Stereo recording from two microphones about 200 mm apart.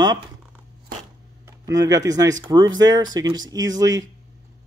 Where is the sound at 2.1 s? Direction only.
20° right (ahead or behind).